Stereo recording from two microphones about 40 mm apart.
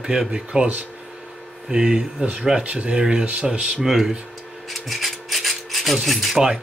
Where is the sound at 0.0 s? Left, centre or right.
Centre.